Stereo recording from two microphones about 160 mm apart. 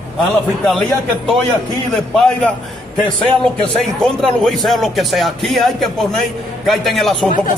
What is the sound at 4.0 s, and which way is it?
A man's voice, centre (ahead or behind).